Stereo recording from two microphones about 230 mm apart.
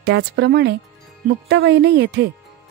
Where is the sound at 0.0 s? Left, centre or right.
Right.